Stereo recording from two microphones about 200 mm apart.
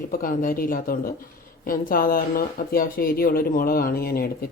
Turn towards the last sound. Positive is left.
turn(degrees=50)  # may be behind; listen again after turning